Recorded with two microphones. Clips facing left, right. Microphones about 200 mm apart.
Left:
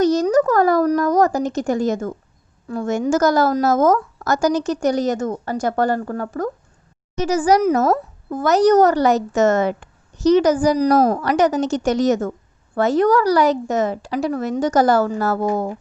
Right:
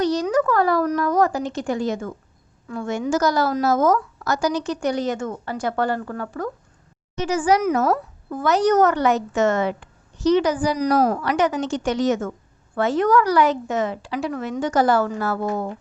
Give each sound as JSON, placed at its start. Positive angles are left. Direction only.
{"t": 0.0, "sound": "a woman's voice", "side_deg": 45}